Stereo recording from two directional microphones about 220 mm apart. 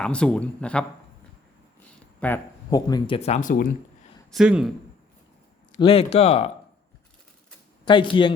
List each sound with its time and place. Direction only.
0.0 s speech: 5° left (ahead or behind)
2.2 s speech: 15° left (ahead or behind); by 3.7 s 40° left (ahead or behind)
4.3 s speech: 5° right (ahead or behind)
5.7 s speech: 25° left (ahead or behind)
7.9 s speech: 20° left (ahead or behind)